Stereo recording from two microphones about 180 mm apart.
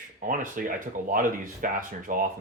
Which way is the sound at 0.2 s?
45° right (ahead or behind).